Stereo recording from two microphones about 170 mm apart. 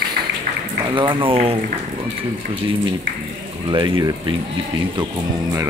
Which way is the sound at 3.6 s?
25° right (ahead or behind).